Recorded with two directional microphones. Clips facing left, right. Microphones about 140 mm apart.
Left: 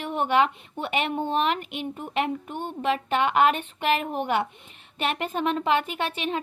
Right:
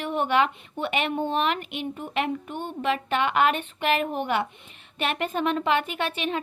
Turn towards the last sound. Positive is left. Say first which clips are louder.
# even
turn(degrees=30)  # may be behind; listen again after turning